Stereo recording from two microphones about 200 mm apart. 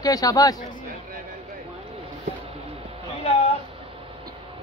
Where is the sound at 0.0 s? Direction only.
20° left (ahead or behind).